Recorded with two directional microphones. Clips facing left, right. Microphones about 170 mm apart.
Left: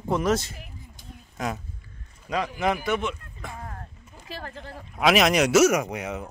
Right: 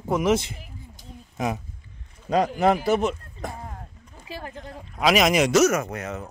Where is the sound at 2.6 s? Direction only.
35° right (ahead or behind).